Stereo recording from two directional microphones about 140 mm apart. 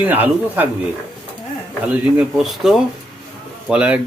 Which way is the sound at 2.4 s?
Centre (ahead or behind).